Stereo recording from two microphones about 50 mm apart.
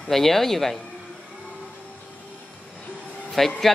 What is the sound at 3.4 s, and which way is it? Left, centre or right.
Speech, centre.